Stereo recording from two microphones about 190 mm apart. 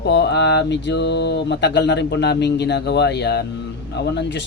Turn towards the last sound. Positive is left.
turn(degrees=65)  # may be behind; listen again after turning